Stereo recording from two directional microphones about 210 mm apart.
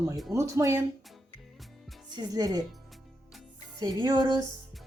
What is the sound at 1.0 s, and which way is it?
Music, centre (ahead or behind).